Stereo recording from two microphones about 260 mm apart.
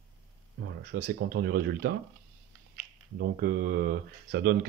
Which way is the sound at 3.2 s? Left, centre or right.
Right.